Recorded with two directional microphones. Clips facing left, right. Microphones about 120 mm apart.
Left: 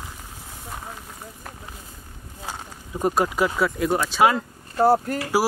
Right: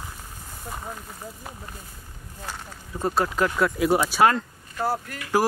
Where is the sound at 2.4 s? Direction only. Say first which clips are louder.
Left 2 dB; 15° left (ahead or behind).